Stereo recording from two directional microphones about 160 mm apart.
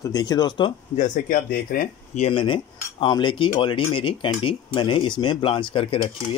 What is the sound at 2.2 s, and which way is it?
Speech, 35° left (ahead or behind).